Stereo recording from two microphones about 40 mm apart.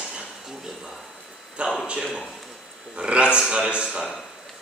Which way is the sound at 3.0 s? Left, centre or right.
Right.